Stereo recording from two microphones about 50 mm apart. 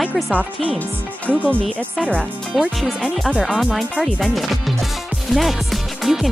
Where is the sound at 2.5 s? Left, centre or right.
Centre.